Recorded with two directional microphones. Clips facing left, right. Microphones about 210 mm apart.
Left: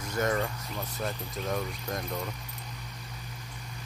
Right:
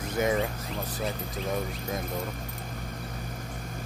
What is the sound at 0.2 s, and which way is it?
Speech, 10° right (ahead or behind).